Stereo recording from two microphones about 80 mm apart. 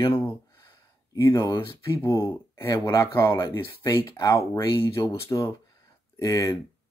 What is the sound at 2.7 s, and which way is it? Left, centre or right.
Speech, left.